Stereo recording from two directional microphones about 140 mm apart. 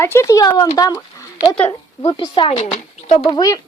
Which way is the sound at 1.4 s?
40° left (ahead or behind).